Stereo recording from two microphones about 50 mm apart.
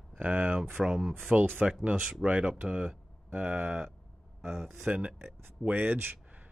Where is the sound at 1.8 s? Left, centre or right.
Right.